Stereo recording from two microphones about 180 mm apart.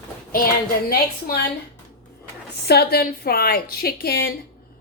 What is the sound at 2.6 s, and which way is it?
A woman's voice, 60° left (ahead or behind).